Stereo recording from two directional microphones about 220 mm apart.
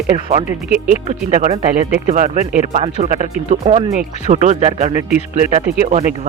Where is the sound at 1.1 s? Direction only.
30° right (ahead or behind).